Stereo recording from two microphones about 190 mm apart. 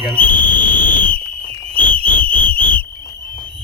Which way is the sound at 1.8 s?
10° left (ahead or behind).